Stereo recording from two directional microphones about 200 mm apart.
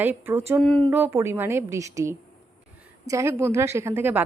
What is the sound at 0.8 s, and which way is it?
A woman's voice, 10° right (ahead or behind).